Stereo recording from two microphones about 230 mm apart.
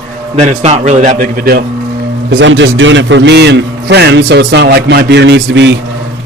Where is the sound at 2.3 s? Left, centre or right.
Right.